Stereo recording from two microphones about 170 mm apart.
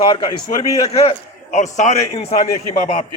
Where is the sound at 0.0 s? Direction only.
30° left (ahead or behind).